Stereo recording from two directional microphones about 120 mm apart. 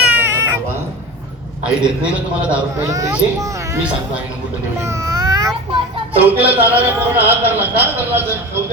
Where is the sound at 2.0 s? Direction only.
10° right (ahead or behind).